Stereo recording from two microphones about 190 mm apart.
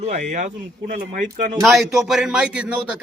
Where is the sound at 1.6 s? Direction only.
Centre (ahead or behind).